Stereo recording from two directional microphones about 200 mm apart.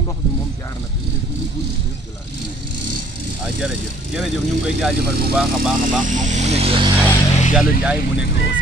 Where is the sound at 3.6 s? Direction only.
5° right (ahead or behind).